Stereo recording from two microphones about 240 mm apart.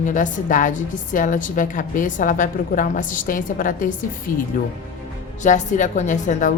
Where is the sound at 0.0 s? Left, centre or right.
Left.